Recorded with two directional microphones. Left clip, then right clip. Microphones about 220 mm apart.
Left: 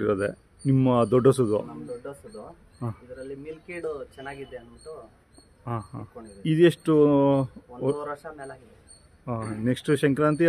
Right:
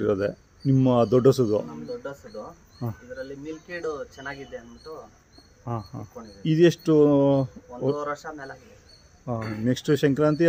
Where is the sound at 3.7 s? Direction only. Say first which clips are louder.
Right 2 dB; 25° left (ahead or behind).